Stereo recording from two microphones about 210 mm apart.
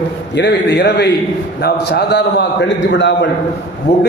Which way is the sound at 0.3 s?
55° left (ahead or behind).